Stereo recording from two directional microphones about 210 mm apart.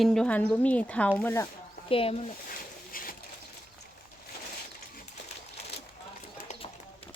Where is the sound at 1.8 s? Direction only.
25° left (ahead or behind).